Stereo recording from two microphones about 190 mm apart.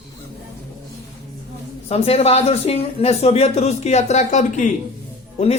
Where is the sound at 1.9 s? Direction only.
35° left (ahead or behind).